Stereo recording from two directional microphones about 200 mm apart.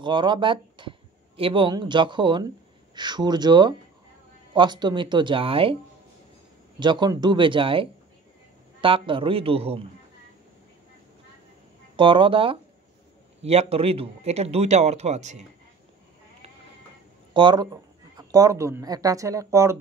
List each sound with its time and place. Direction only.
0.0 s speech: 25° right (ahead or behind)
6.8 s speech: 20° right (ahead or behind)
12.0 s speech: 25° right (ahead or behind)
17.3 s speech: 25° right (ahead or behind)